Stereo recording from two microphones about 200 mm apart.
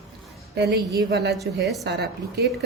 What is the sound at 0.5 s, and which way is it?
A woman's voice, 55° right (ahead or behind).